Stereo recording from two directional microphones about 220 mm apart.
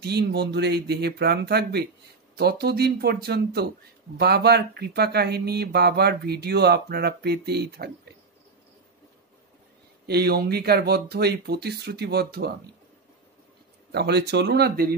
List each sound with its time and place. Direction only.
0.0 s speech: 50° right (ahead or behind)
10.0 s speech: 45° right (ahead or behind)
13.9 s speech: 50° right (ahead or behind)